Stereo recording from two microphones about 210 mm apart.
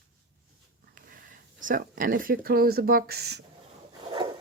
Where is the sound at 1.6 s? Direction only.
40° right (ahead or behind).